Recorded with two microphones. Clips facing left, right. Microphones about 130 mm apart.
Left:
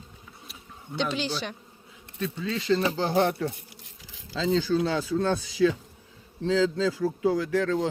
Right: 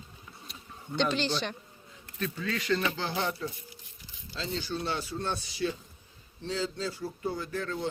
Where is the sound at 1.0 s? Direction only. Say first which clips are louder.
Even; 10° left (ahead or behind).